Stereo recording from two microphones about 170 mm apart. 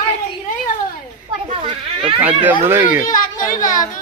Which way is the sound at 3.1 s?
50° left (ahead or behind).